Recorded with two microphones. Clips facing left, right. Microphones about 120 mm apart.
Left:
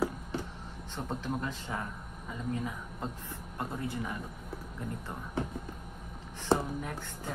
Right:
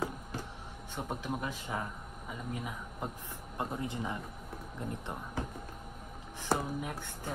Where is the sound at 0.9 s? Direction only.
10° right (ahead or behind).